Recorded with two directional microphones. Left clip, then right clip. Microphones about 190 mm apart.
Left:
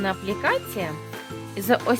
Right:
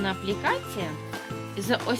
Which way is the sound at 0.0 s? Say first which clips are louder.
Left 3 dB; 35° left (ahead or behind).